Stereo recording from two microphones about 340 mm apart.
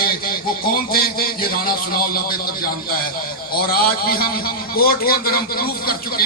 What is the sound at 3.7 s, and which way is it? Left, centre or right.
A man's voice, left.